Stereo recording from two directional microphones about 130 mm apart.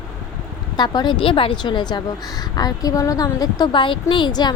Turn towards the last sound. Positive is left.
turn(degrees=35)  # may be behind; listen again after turning